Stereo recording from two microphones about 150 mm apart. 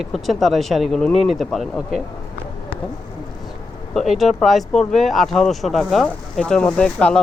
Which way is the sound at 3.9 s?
Centre (ahead or behind).